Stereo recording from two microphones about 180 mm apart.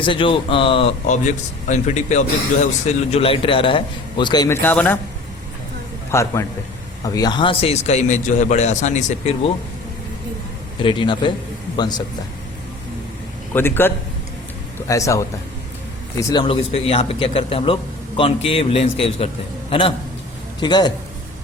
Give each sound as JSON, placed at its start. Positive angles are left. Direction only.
{"t": 0.0, "sound": "speech", "side_deg": 30}
{"t": 6.1, "sound": "a man's voice", "side_deg": 15}
{"t": 10.8, "sound": "speech", "side_deg": 25}
{"t": 13.5, "sound": "a man's voice", "side_deg": 10}
{"t": 20.6, "sound": "speech", "side_deg": 25}